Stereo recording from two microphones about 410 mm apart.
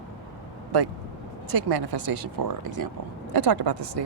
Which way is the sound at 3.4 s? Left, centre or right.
Right.